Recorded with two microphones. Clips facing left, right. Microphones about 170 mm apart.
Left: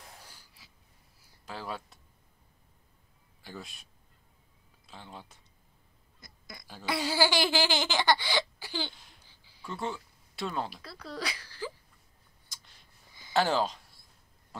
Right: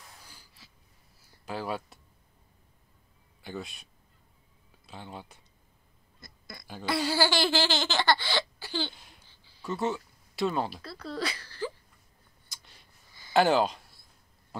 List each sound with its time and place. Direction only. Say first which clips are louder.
1.4 s speech: right 5 dB; 5° right (ahead or behind)
3.4 s speech: right 6 dB; centre (ahead or behind)
4.8 s speech: right 4 dB; 5° right (ahead or behind)
6.2 s a sound: right 2 dB; 15° left (ahead or behind)
6.9 s speech: right 1 dB; 15° left (ahead or behind)
9.7 s speech: right 6 dB; 5° right (ahead or behind)
10.8 s speech: right 4 dB; 10° left (ahead or behind)
12.4 s a sound: right 2 dB; 5° right (ahead or behind)
13.3 s speech: right 4 dB; 5° right (ahead or behind)